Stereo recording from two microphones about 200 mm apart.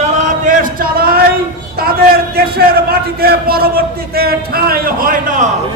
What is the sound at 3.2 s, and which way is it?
Speech, 50° right (ahead or behind).